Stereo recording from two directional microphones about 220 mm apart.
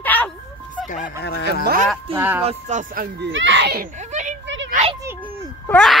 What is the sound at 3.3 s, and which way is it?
A child's voice, 55° right (ahead or behind).